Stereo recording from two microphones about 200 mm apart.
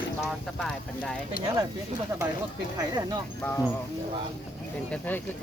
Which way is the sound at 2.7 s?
20° right (ahead or behind).